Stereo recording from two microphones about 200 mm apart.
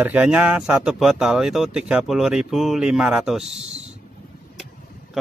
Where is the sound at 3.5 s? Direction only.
35° right (ahead or behind).